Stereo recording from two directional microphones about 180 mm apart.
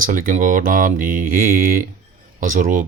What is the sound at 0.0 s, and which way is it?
Speech, 50° right (ahead or behind).